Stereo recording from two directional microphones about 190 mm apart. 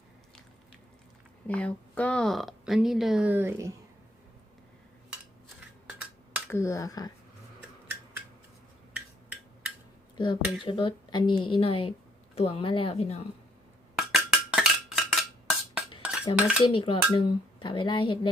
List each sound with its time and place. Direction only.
1.5 s speech: 5° left (ahead or behind); by 3.7 s 10° right (ahead or behind)
6.5 s speech: 15° left (ahead or behind)
8.9 s a sound: 5° right (ahead or behind)
10.2 s speech: 25° left (ahead or behind)
13.9 s a sound: 5° right (ahead or behind)
16.3 s speech: 5° right (ahead or behind)
16.6 s speech: 25° left (ahead or behind)